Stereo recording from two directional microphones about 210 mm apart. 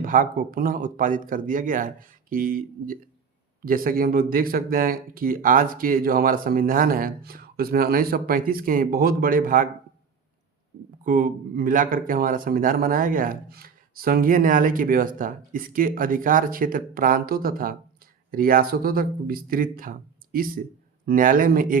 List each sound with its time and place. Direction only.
0.0 s speech: 40° right (ahead or behind)
11.0 s speech: 40° right (ahead or behind)